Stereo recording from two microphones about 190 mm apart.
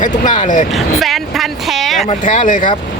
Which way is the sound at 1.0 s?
Centre (ahead or behind).